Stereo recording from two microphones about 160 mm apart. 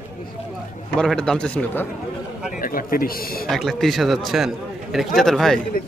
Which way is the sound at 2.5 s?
60° left (ahead or behind).